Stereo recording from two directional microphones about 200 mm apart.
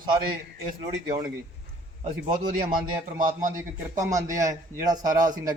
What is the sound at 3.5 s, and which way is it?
A man's voice, 15° right (ahead or behind).